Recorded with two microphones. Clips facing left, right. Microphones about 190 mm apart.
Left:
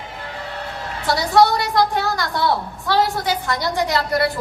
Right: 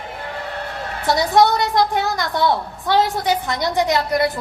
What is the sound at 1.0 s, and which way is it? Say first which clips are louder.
A woman's voice: even; 20° right (ahead or behind).